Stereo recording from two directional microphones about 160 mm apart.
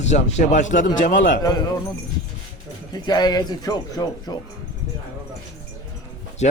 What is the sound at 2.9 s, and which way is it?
Speech, 25° left (ahead or behind).